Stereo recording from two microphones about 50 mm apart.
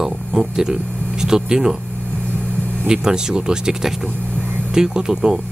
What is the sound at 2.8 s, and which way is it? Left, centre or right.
Speech, centre.